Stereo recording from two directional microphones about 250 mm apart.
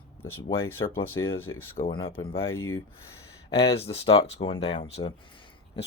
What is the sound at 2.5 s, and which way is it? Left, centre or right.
Speech, centre.